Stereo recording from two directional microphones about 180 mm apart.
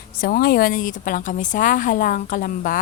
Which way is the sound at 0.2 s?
55° left (ahead or behind).